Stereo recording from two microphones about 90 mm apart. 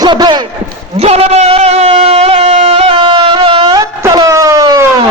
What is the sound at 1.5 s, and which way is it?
Music, 90° right.